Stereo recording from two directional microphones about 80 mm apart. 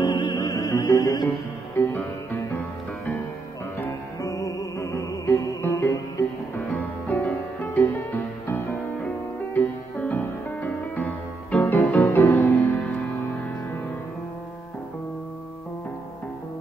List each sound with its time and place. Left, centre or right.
0.0 s music: left
0.4 s music: left
1.8 s music: left
4.2 s music: left
6.6 s music: left